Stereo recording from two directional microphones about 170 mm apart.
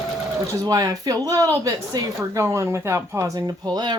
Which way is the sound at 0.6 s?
25° right (ahead or behind).